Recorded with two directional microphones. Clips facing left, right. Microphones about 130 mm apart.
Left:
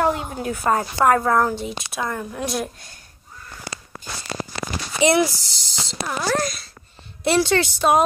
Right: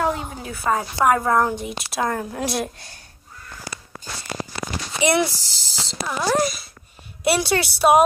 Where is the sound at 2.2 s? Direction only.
35° right (ahead or behind).